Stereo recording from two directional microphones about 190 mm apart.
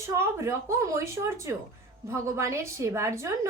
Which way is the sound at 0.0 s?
15° right (ahead or behind).